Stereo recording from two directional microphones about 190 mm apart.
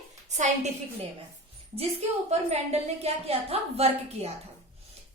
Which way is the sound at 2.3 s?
35° right (ahead or behind).